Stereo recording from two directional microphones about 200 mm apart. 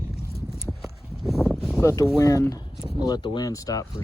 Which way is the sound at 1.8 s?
15° left (ahead or behind).